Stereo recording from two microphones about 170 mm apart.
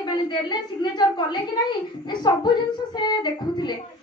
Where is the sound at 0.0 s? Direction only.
25° left (ahead or behind).